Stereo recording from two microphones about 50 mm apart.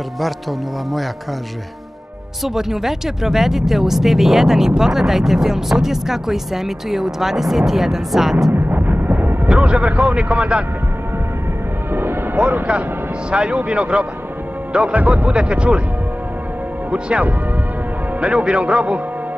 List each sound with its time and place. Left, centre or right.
2.4 s speech: centre
8.5 s a sound: right
9.5 s a man's voice: right
11.9 s music: right
12.4 s speech: centre
16.9 s speech: right